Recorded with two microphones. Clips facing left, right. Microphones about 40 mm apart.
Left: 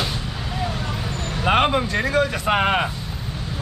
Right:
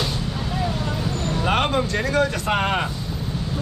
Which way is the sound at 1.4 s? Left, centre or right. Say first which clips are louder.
Left 3 dB; centre.